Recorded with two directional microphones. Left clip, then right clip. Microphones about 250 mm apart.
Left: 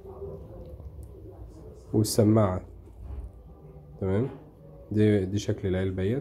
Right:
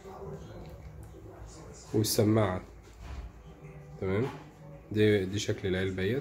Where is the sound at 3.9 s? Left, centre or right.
Centre.